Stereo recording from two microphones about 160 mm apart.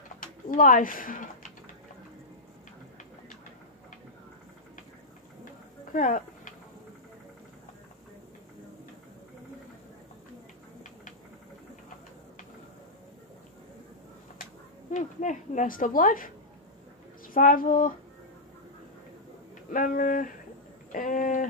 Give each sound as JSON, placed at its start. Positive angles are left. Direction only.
{"t": 0.2, "sound": "speech", "side_deg": 55}
{"t": 5.9, "sound": "a sound", "side_deg": 55}
{"t": 14.9, "sound": "speech", "side_deg": 50}
{"t": 17.3, "sound": "speech", "side_deg": 60}
{"t": 19.7, "sound": "speech", "side_deg": 55}
{"t": 20.9, "sound": "a sound", "side_deg": 55}